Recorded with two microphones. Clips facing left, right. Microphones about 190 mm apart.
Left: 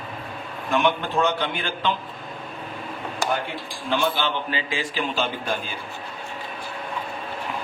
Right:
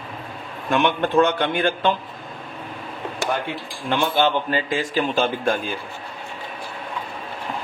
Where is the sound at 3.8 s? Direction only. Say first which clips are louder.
Right 4 dB; 55° right (ahead or behind).